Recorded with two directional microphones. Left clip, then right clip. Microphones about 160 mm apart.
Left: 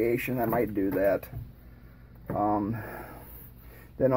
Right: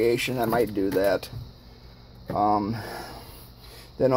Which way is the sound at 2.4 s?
30° right (ahead or behind).